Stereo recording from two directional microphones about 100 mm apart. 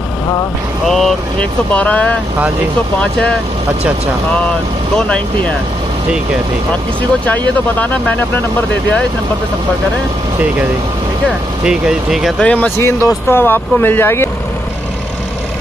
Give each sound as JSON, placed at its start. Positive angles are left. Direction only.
{"t": 0.8, "sound": "speech", "side_deg": 5}
{"t": 1.7, "sound": "speech", "side_deg": 15}
{"t": 4.9, "sound": "speech", "side_deg": 10}
{"t": 11.6, "sound": "speech", "side_deg": -10}
{"t": 12.4, "sound": "speech", "side_deg": 15}